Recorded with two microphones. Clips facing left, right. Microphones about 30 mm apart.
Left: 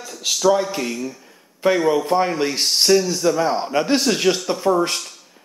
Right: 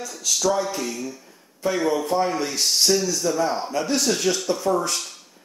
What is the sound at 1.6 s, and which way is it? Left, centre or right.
A man's voice, left.